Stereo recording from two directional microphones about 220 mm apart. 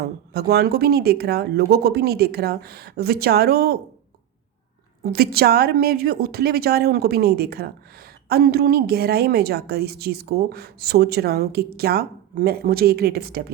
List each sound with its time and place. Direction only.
0.0 s a woman's voice: 45° right (ahead or behind)
5.1 s a woman's voice: 45° right (ahead or behind)